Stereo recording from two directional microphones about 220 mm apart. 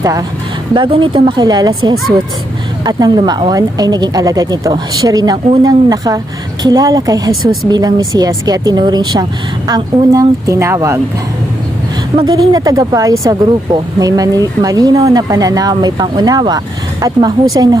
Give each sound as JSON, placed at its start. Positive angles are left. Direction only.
{"t": 0.0, "sound": "speech", "side_deg": -15}
{"t": 2.8, "sound": "speech", "side_deg": -15}
{"t": 12.1, "sound": "speech", "side_deg": -20}